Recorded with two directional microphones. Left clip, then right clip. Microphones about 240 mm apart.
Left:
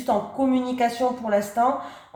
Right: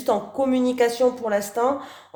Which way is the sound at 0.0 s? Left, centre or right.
Right.